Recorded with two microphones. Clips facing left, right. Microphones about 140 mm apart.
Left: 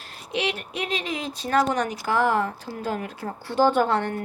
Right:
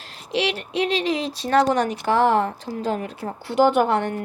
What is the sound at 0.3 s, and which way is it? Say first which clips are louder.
A woman's voice: right 5 dB; 30° right (ahead or behind).